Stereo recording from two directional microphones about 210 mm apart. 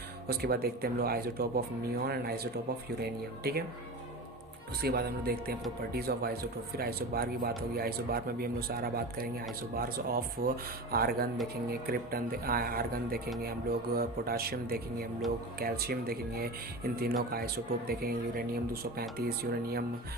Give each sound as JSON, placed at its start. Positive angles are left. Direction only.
{"t": 0.3, "sound": "speech", "side_deg": -45}
{"t": 4.8, "sound": "speech", "side_deg": -50}